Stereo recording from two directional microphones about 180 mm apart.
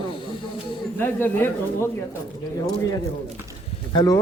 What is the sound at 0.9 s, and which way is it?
Speech, 10° left (ahead or behind).